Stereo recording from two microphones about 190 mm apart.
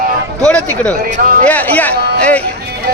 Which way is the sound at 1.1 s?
45° right (ahead or behind).